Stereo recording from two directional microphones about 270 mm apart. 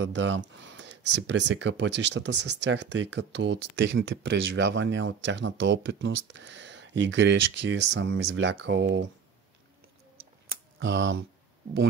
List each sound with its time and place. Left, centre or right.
0.0 s speech: right
10.5 s typing: right